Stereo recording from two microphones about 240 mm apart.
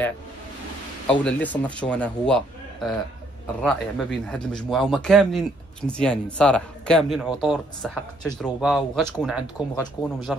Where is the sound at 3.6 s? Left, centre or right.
Centre.